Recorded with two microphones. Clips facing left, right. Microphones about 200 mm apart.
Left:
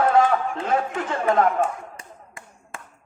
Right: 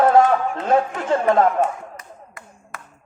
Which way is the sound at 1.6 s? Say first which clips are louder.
Right 3 dB; 30° left (ahead or behind).